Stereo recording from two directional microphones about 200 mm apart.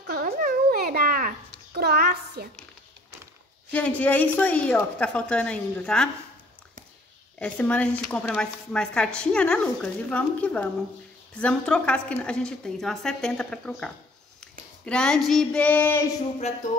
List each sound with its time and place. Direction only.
0.1 s dog: 45° right (ahead or behind)
1.7 s child singing: 50° right (ahead or behind)
3.7 s a woman's voice: 5° left (ahead or behind)
7.3 s a woman's voice: 5° left (ahead or behind)